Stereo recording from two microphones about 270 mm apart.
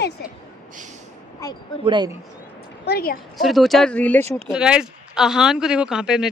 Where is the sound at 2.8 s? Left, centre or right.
Left.